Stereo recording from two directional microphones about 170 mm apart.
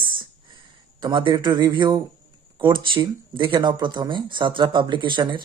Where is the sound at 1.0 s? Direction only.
30° right (ahead or behind).